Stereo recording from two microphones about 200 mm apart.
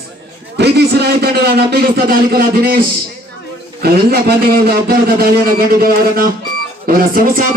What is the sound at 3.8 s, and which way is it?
A man's voice, 50° right (ahead or behind).